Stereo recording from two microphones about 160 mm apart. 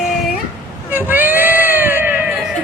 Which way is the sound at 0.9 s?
10° right (ahead or behind).